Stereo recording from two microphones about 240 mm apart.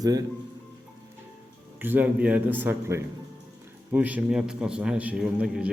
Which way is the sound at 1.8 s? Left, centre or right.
Centre.